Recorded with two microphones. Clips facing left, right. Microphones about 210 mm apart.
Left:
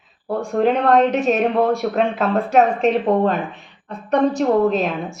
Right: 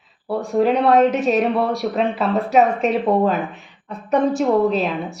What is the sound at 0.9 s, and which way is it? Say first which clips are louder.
A woman's voice: even; centre (ahead or behind).